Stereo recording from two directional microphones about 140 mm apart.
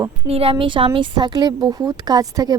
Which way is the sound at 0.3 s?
45° right (ahead or behind).